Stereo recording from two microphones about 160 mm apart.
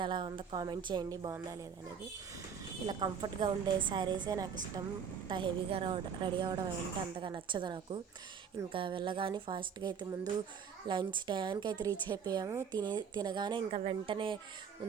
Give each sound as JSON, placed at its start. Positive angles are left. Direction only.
{"t": 0.0, "sound": "a woman's voice", "side_deg": -30}
{"t": 2.8, "sound": "a woman's voice", "side_deg": -25}